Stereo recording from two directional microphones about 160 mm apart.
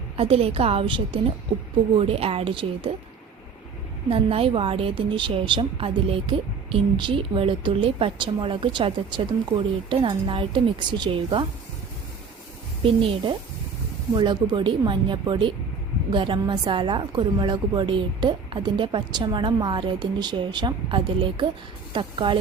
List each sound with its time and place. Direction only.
0.2 s a woman's voice: 40° right (ahead or behind)
4.1 s a woman's voice: 35° right (ahead or behind)
12.8 s a woman's voice: 35° right (ahead or behind)